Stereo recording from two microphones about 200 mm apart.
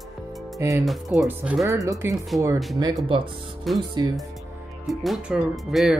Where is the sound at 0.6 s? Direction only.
15° right (ahead or behind).